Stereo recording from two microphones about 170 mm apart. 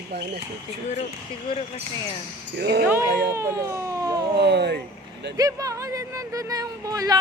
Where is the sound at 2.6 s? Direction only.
75° right (ahead or behind).